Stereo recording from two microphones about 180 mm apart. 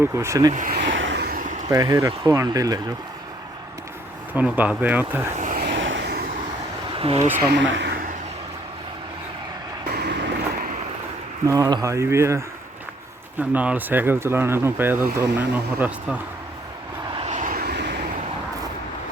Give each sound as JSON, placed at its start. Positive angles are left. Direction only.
{"t": 0.0, "sound": "speech", "side_deg": -15}
{"t": 0.5, "sound": "speech", "side_deg": -50}
{"t": 0.9, "sound": "vehicle", "side_deg": -80}
{"t": 1.6, "sound": "speech", "side_deg": -20}
{"t": 4.4, "sound": "speech", "side_deg": -10}
{"t": 5.3, "sound": "vehicle", "side_deg": -45}
{"t": 6.9, "sound": "speech", "side_deg": -30}
{"t": 7.5, "sound": "speech", "side_deg": -85}
{"t": 9.9, "sound": "vehicle", "side_deg": -65}
{"t": 11.4, "sound": "speech", "side_deg": -20}
{"t": 13.5, "sound": "speech", "side_deg": -10}
{"t": 17.2, "sound": "vehicle", "side_deg": -40}